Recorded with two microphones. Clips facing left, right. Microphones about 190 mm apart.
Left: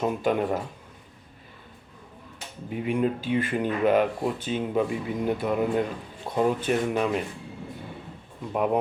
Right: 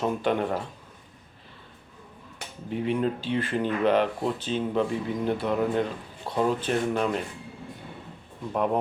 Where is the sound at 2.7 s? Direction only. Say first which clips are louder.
Left 1 dB; 5° left (ahead or behind).